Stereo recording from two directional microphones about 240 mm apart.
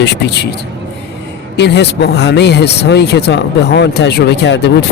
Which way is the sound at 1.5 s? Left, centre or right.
Left.